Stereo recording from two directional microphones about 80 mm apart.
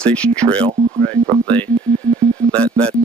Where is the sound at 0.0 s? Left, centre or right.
Centre.